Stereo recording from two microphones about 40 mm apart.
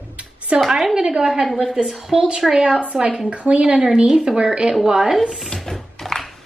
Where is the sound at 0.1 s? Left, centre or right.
Right.